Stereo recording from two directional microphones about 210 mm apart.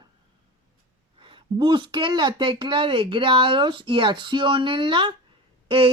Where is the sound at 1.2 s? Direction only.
25° right (ahead or behind).